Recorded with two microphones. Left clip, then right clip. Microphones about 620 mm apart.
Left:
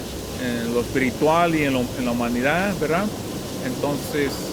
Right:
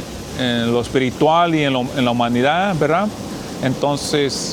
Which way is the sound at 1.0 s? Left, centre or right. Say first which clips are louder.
Right 4 dB; right.